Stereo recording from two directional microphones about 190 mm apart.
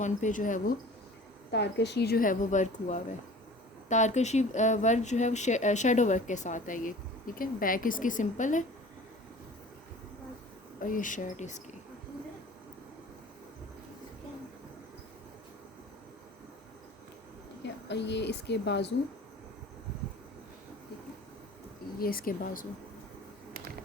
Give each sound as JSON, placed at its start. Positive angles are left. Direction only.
{"t": 0.0, "sound": "a woman's voice", "side_deg": 40}
{"t": 1.5, "sound": "a woman's voice", "side_deg": 60}
{"t": 10.8, "sound": "a woman's voice", "side_deg": 45}
{"t": 17.8, "sound": "speech", "side_deg": 65}
{"t": 21.9, "sound": "a woman's voice", "side_deg": 50}